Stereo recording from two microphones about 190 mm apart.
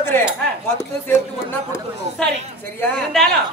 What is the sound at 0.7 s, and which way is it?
Speech, 15° left (ahead or behind).